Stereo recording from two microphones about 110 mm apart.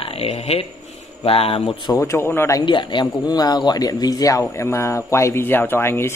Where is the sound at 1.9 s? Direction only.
25° left (ahead or behind).